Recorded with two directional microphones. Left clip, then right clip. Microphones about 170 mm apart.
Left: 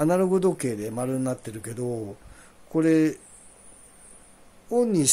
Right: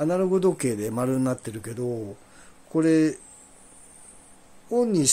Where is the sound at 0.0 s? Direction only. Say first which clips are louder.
Left 1 dB; 20° left (ahead or behind).